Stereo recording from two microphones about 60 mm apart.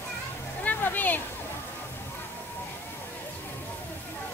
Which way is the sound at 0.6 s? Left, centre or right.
Left.